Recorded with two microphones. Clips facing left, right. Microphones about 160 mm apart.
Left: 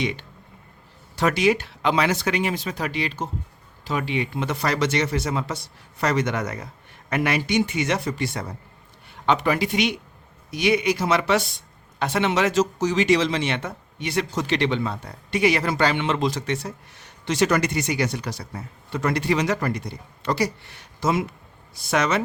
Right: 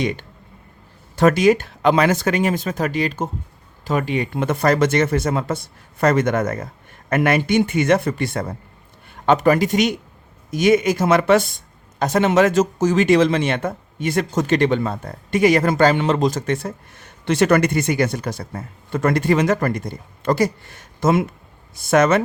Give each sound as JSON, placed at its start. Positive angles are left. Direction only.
{"t": 0.0, "sound": "a man's voice", "side_deg": -45}